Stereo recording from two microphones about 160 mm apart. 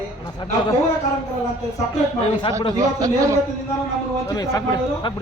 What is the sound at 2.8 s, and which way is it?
Speech, 20° right (ahead or behind).